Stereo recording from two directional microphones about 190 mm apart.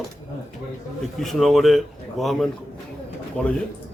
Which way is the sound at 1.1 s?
Centre (ahead or behind).